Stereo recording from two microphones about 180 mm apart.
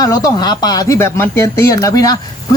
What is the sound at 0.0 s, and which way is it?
Speech, 20° left (ahead or behind).